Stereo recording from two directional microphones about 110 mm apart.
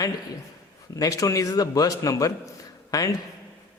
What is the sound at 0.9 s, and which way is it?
A man's voice, 30° left (ahead or behind).